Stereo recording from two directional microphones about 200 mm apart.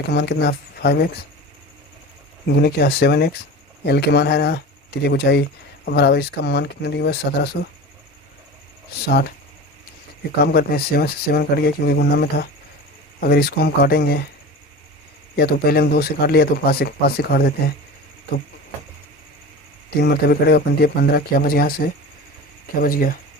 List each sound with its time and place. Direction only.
0.1 s speech: 55° left (ahead or behind)
2.6 s speech: 55° left (ahead or behind)
9.0 s speech: 55° left (ahead or behind)
10.4 s speech: 50° left (ahead or behind)
15.4 s speech: 50° left (ahead or behind)
20.0 s speech: 50° left (ahead or behind)